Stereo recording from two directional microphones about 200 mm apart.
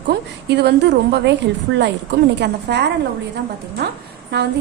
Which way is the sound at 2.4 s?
60° right (ahead or behind).